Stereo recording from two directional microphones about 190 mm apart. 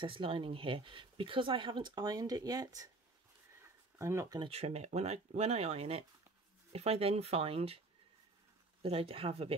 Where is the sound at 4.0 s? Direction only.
15° right (ahead or behind).